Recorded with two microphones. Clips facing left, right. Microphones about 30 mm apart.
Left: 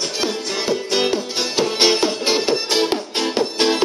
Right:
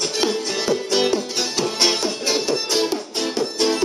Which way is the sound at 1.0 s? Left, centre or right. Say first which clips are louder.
Even; centre.